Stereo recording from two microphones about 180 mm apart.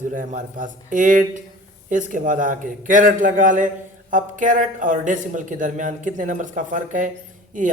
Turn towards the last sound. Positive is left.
turn(degrees=-45)  # may be behind; listen again after turning